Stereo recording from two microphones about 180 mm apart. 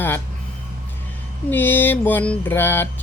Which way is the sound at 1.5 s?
10° left (ahead or behind).